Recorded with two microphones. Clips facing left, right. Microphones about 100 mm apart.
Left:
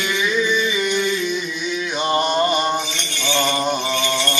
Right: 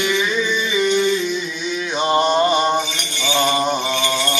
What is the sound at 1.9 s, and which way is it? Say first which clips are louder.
Mantra: right 3 dB; 15° right (ahead or behind).